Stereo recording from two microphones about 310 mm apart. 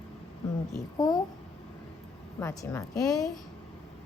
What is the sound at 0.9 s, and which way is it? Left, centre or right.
Speech, centre.